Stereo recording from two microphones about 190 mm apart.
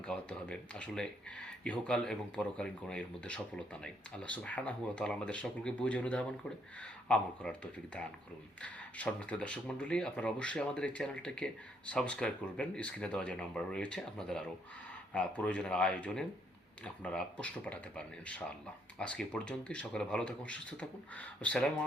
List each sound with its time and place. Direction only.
0.0 s speech: 5° left (ahead or behind)